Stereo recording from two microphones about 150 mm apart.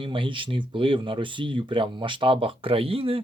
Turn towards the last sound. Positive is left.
turn(degrees=-40)  # may be behind; listen again after turning